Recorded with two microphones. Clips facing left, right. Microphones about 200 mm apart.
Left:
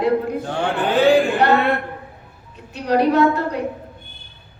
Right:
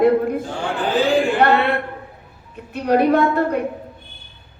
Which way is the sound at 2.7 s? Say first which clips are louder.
Right 1 dB; 55° right (ahead or behind).